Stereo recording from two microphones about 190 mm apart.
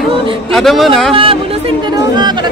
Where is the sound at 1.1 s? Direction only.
30° right (ahead or behind).